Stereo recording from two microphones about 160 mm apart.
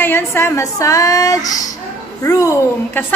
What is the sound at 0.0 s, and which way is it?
A woman's voice, 15° left (ahead or behind).